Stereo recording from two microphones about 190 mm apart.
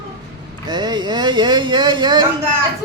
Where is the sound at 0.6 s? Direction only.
25° right (ahead or behind).